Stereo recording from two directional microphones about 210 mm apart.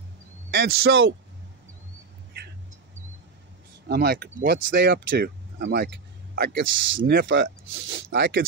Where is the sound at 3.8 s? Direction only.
50° right (ahead or behind).